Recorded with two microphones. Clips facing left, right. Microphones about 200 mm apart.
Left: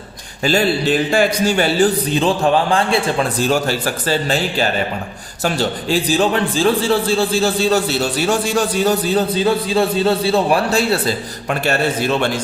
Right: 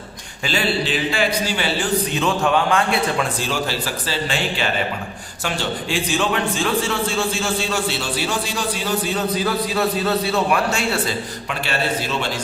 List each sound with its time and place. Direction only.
0.4 s a man's voice: 45° left (ahead or behind)
2.1 s a man's voice: 30° left (ahead or behind)
3.5 s a man's voice: 50° left (ahead or behind); by 10.8 s 35° left (ahead or behind)
11.4 s a man's voice: 45° left (ahead or behind)